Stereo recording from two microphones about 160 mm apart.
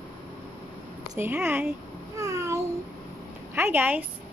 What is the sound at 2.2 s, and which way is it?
Babbling, 20° right (ahead or behind).